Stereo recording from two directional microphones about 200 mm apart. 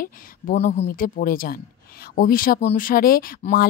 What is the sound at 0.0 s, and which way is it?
Speech, 40° left (ahead or behind).